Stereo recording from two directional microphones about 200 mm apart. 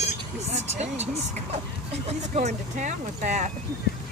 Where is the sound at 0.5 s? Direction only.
35° right (ahead or behind).